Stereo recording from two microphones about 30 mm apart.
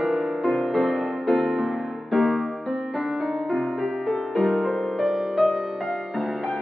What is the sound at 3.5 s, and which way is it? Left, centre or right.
Music, centre.